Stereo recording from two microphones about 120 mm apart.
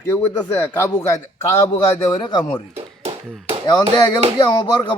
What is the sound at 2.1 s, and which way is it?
Speech, 35° left (ahead or behind).